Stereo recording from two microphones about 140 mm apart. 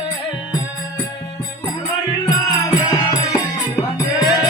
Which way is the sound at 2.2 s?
25° left (ahead or behind).